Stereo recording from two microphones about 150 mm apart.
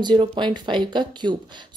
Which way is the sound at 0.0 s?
30° right (ahead or behind).